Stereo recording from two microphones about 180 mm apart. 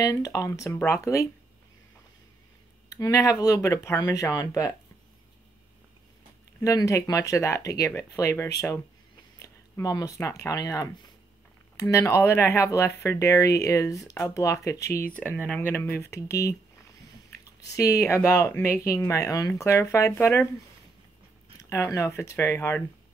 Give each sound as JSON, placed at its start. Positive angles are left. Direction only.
{"t": 0.0, "sound": "speech", "side_deg": 20}
{"t": 2.9, "sound": "speech", "side_deg": 20}
{"t": 6.6, "sound": "speech", "side_deg": 20}
{"t": 9.4, "sound": "a sound", "side_deg": 20}
{"t": 10.4, "sound": "speech", "side_deg": 20}
{"t": 17.6, "sound": "speech", "side_deg": 20}
{"t": 21.6, "sound": "speech", "side_deg": 15}